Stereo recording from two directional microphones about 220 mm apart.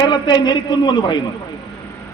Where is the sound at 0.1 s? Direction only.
20° left (ahead or behind).